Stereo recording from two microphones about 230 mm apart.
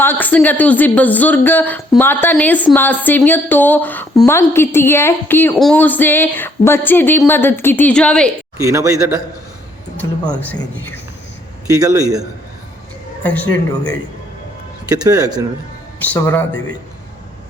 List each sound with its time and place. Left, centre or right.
0.0 s speech: centre
8.5 s speech: centre
10.0 s speech: centre
11.7 s speech: centre
13.2 s speech: centre
14.8 s speech: centre
16.0 s speech: centre